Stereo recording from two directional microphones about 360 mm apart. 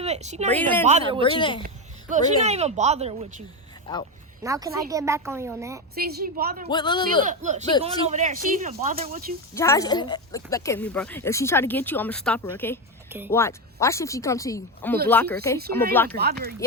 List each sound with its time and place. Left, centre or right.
0.0 s speech: centre
1.2 s speech: centre
1.6 s speech: right
4.4 s speech: centre
5.9 s speech: right
6.7 s speech: centre
7.3 s speech: centre
9.6 s speech: centre
13.1 s speech: centre
13.3 s speech: centre
16.1 s speech: right